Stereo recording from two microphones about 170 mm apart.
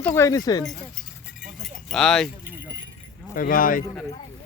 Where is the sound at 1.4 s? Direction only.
Centre (ahead or behind).